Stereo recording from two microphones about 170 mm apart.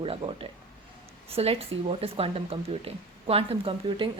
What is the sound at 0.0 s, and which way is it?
A woman's voice, 30° right (ahead or behind).